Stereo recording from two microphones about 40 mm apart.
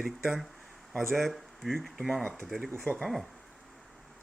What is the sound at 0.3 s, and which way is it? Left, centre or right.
Speech, centre.